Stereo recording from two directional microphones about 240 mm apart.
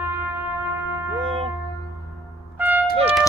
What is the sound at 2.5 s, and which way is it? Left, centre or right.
Music, centre.